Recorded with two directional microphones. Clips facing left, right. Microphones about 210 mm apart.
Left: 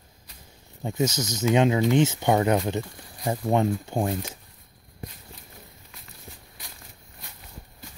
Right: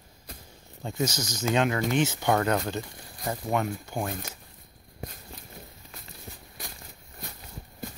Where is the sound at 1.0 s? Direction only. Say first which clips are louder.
Left 6 dB; 20° left (ahead or behind).